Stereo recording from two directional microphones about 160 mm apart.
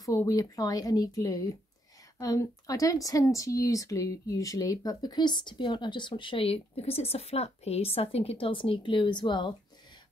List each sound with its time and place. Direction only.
0.0 s speech: 20° left (ahead or behind)